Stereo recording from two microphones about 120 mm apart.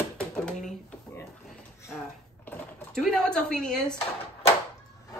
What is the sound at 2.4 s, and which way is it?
Typing, 15° left (ahead or behind).